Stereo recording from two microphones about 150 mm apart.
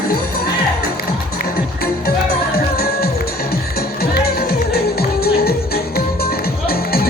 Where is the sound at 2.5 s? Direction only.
90° left.